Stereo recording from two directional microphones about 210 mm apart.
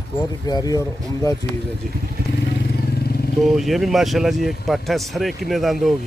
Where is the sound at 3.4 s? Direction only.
Centre (ahead or behind).